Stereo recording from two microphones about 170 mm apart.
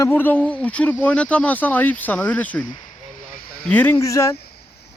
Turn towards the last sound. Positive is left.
turn(degrees=15)  # may be behind; listen again after turning